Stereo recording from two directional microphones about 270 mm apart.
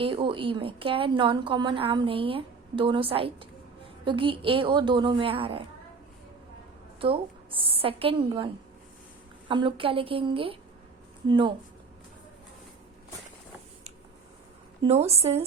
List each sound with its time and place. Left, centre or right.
0.0 s a woman's voice: centre
7.0 s a woman's voice: centre
9.5 s a woman's voice: centre
14.8 s a woman's voice: right